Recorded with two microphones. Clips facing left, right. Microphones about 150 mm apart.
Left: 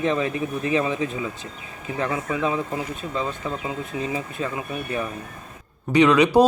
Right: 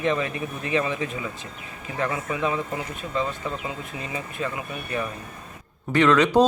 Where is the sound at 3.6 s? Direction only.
25° left (ahead or behind).